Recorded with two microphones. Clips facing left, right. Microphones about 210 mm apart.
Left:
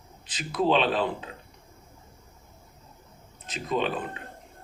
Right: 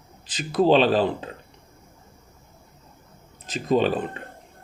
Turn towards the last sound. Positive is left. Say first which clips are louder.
# right 7 dB
turn(degrees=-35)  # may be behind; listen again after turning